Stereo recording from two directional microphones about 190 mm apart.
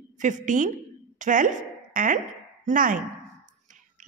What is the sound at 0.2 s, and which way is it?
A woman's voice, 40° right (ahead or behind).